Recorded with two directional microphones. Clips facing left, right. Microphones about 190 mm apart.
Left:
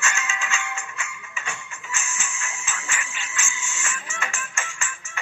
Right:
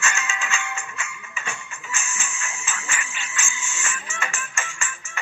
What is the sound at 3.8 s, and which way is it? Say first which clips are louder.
Music: right 1 dB; 50° right (ahead or behind).